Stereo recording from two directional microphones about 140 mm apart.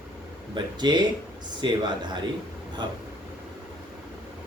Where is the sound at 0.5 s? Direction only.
30° right (ahead or behind).